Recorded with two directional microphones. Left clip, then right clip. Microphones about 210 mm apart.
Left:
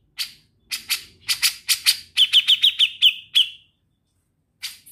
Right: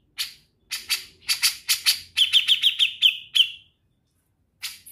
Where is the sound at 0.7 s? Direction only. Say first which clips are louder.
Left 1 dB; 15° left (ahead or behind).